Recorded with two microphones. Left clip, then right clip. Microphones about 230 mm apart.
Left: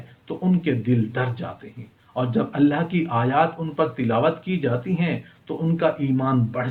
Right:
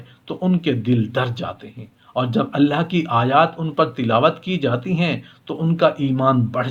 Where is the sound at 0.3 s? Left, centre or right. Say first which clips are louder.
Right 3 dB; right.